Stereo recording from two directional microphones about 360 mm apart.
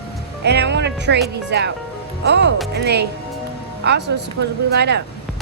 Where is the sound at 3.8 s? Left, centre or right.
Right.